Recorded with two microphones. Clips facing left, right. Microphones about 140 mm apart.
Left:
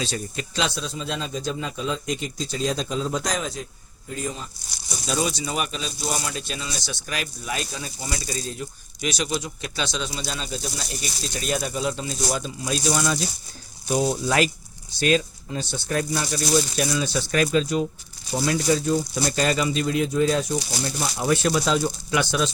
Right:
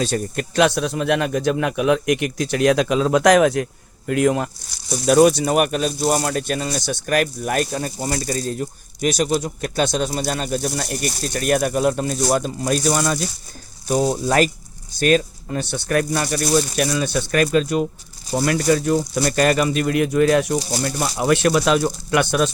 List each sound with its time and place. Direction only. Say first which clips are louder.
0.0 s speech: right 7 dB; 55° right (ahead or behind); by 4.4 s 80° right
5.0 s speech: right 13 dB; 60° right (ahead or behind)
13.9 s speech: right 4 dB; 40° right (ahead or behind)
18.4 s speech: right 4 dB; 65° right (ahead or behind)
20.6 s speech: right 5 dB; 40° right (ahead or behind)
20.8 s speech: right 4 dB; 65° right (ahead or behind)